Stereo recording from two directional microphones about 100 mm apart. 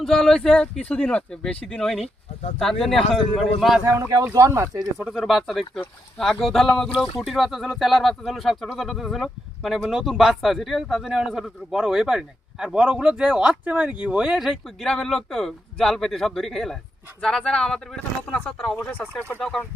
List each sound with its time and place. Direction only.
0.0 s speech: 5° left (ahead or behind)
4.3 s speech: 30° right (ahead or behind)
4.9 s speech: 5° right (ahead or behind)